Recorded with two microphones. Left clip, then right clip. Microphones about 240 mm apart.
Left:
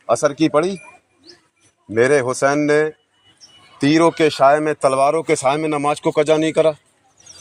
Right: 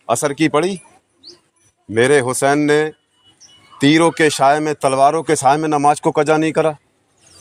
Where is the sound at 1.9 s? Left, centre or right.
Right.